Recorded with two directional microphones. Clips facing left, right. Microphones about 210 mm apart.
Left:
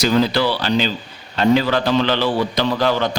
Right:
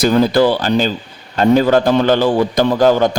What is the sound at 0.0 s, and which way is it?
A man's voice, 50° right (ahead or behind).